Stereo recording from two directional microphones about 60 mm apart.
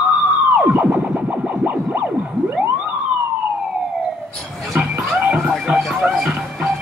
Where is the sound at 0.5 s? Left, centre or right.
Right.